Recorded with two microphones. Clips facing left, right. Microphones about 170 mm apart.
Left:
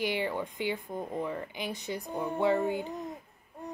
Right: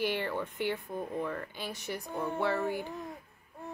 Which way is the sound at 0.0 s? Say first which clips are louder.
Left 1 dB; 15° left (ahead or behind).